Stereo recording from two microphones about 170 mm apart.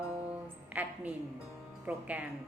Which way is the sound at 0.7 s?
10° right (ahead or behind).